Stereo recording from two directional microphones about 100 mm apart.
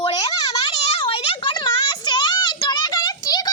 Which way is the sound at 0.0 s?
45° left (ahead or behind).